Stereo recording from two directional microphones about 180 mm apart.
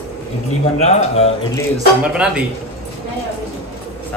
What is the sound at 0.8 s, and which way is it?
Speech, 35° left (ahead or behind).